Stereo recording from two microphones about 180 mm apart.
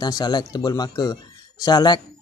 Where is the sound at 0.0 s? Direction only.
25° left (ahead or behind).